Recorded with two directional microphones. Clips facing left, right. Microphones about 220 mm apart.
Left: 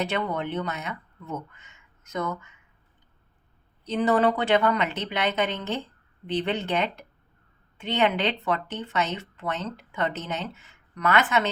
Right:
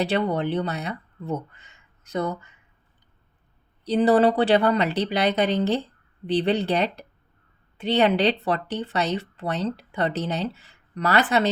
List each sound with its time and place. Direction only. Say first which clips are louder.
0.0 s speech: right 5 dB; 35° right (ahead or behind)
3.8 s speech: right 4 dB; 35° right (ahead or behind)